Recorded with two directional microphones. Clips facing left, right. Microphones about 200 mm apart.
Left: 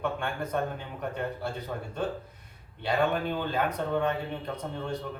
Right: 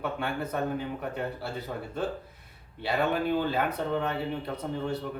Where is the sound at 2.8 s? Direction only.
5° right (ahead or behind).